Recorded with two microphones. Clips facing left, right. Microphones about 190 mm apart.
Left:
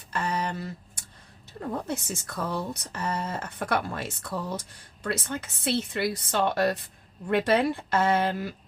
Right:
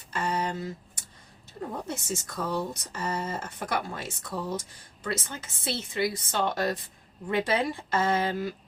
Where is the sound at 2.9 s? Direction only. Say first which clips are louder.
Left 3 dB; 60° left (ahead or behind).